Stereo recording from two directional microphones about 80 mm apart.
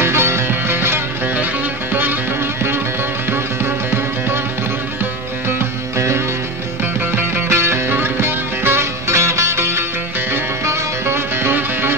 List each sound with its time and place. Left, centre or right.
0.0 s music: right
3.3 s music: right
5.9 s music: right
6.8 s music: right